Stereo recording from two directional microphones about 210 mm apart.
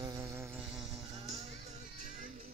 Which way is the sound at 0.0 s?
15° right (ahead or behind).